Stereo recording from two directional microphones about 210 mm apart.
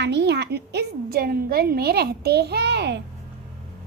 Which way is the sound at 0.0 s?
55° right (ahead or behind).